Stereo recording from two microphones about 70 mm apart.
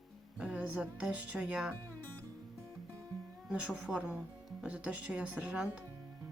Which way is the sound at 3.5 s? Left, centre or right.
Centre.